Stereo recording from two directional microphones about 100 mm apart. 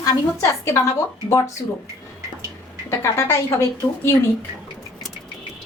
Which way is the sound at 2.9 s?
25° left (ahead or behind).